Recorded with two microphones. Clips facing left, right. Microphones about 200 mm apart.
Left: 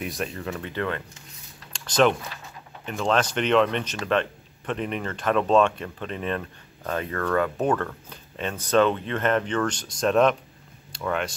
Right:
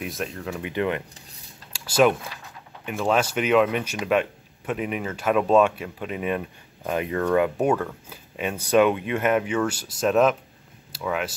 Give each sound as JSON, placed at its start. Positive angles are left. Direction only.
{"t": 0.0, "sound": "speech", "side_deg": 0}
{"t": 0.6, "sound": "speech", "side_deg": -15}